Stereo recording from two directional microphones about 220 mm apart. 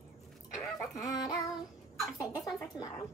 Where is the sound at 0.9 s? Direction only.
15° left (ahead or behind).